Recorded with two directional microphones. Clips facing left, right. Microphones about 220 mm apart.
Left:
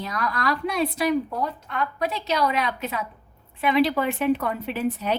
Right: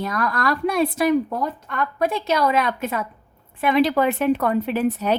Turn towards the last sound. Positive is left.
turn(degrees=-45)  # may be behind; listen again after turning